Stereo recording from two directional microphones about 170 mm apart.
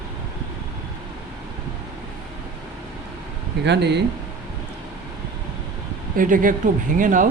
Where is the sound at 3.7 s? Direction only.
85° right.